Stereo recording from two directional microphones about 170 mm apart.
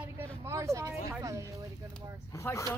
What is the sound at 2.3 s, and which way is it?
Speech, 15° left (ahead or behind).